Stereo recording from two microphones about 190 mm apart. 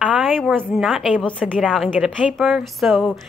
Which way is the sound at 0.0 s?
5° right (ahead or behind).